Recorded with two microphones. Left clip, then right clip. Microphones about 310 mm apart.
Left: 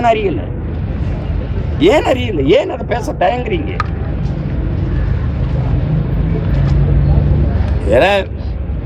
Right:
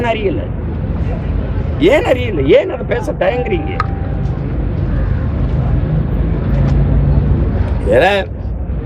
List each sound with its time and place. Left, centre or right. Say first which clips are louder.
0.0 s speech: left 3 dB; centre
1.8 s speech: even; centre
7.9 s speech: even; centre